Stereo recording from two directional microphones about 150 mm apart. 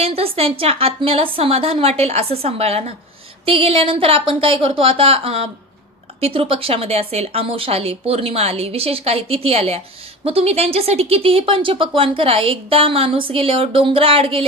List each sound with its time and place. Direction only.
0.0 s speech: 40° right (ahead or behind)